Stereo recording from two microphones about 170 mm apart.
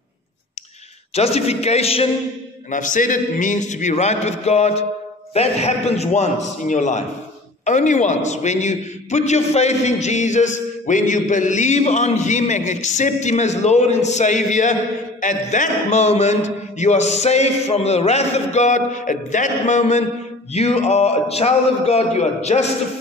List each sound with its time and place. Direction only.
1.1 s a man's voice: 35° left (ahead or behind)
2.7 s a man's voice: 50° left (ahead or behind)